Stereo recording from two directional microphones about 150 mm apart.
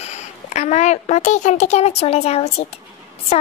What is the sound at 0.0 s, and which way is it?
A child's voice, 50° left (ahead or behind).